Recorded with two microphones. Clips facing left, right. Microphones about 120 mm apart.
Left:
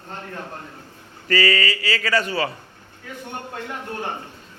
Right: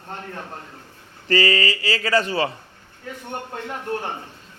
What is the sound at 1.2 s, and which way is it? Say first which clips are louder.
A man's voice: right 1 dB; 30° right (ahead or behind).